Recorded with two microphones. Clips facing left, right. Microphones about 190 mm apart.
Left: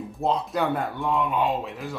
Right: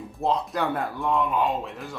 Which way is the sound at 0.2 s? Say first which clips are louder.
Left 1 dB; centre (ahead or behind).